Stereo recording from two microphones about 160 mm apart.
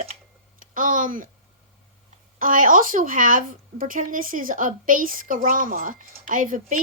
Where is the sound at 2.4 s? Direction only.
55° right (ahead or behind).